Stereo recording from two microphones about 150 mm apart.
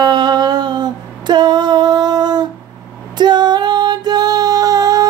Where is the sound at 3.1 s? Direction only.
30° right (ahead or behind).